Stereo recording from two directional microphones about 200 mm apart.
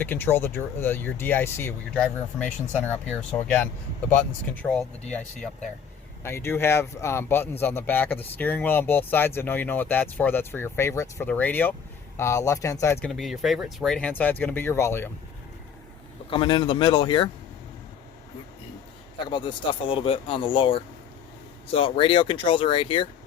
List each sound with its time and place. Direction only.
0.0 s speech: 10° left (ahead or behind)
6.2 s speech: 10° left (ahead or behind)
13.1 s speech: centre (ahead or behind)
16.3 s speech: 25° left (ahead or behind)
19.3 s speech: 20° left (ahead or behind)